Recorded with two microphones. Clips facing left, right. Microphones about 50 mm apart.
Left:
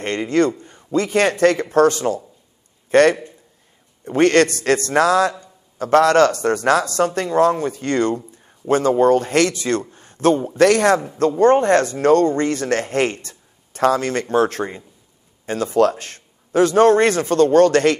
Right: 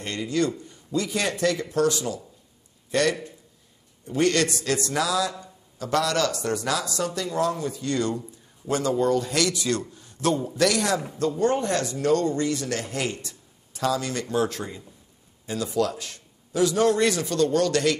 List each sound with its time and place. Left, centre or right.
0.0 s a man's voice: left